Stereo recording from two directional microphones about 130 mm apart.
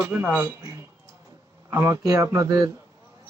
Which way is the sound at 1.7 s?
20° right (ahead or behind).